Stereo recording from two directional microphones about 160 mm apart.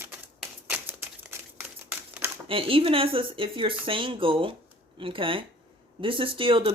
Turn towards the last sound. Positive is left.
turn(degrees=-35)  # may be behind; listen again after turning